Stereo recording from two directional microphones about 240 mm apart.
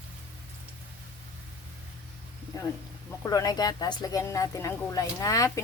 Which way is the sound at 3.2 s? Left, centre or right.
Centre.